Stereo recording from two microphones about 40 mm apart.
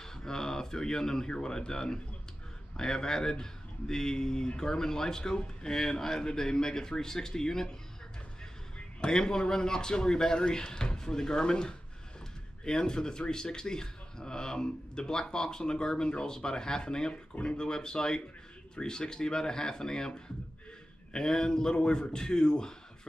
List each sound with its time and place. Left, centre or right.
0.0 s speech: centre
8.7 s speech: centre